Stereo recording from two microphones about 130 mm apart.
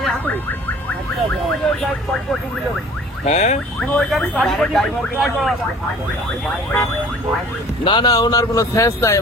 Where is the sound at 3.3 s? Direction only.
60° left (ahead or behind).